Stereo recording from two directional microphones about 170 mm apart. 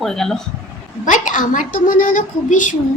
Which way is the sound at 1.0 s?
50° left (ahead or behind).